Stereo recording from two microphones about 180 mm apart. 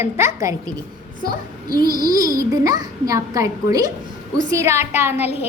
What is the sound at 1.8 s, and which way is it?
A child's voice, 20° right (ahead or behind).